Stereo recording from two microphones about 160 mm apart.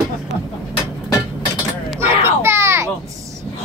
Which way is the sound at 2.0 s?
15° right (ahead or behind).